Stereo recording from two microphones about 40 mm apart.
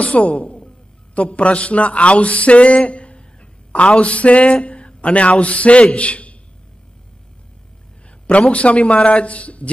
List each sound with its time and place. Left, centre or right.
0.0 s a man's voice: left
8.3 s a man's voice: left